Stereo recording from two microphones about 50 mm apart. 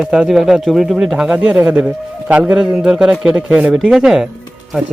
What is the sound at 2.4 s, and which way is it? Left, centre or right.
Speech, centre.